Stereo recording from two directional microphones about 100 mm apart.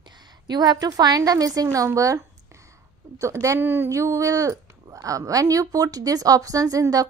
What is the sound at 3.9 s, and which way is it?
A woman's voice, 30° right (ahead or behind).